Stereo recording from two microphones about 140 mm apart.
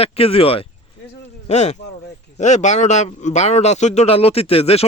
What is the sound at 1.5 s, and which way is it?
Speech, 55° left (ahead or behind).